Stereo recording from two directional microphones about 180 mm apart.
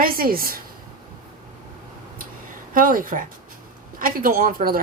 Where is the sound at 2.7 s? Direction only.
50° right (ahead or behind).